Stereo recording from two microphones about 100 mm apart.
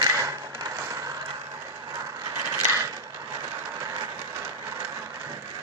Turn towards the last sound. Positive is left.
turn(degrees=-35)  # may be behind; listen again after turning